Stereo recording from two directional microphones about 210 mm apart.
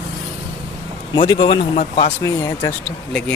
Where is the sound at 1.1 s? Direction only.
25° left (ahead or behind).